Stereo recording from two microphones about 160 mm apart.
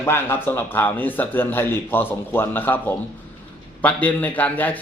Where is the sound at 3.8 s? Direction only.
10° left (ahead or behind).